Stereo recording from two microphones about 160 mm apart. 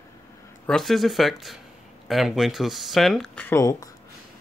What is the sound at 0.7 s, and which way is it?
Speech, centre (ahead or behind).